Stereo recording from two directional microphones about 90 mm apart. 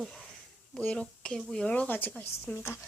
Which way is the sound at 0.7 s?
10° left (ahead or behind).